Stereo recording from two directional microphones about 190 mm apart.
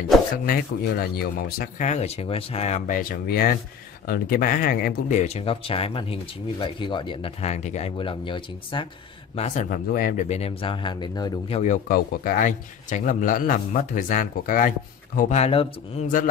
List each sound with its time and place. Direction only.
0.5 s a man's voice: 50° left (ahead or behind)
5.2 s speech: 30° left (ahead or behind)
9.3 s speech: 40° left (ahead or behind); by 11.5 s 20° left (ahead or behind)
11.5 s a man's voice: 40° left (ahead or behind)